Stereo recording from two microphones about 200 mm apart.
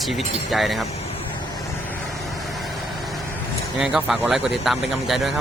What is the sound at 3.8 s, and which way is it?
Speech, 5° right (ahead or behind).